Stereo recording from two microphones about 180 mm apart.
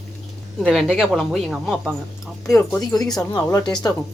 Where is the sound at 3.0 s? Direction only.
20° left (ahead or behind).